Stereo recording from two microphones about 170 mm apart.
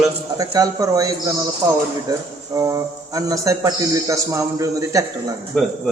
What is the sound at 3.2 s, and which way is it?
A man's voice, 20° right (ahead or behind).